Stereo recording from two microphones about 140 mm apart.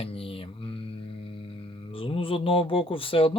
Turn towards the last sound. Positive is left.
turn(degrees=40)  # may be behind; listen again after turning